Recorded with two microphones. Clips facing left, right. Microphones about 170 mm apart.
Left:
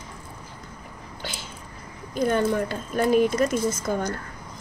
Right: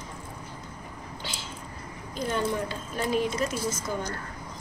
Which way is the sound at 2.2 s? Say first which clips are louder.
Left 6 dB; 55° left (ahead or behind).